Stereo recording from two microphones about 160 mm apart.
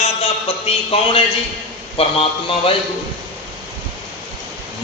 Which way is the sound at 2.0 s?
35° left (ahead or behind).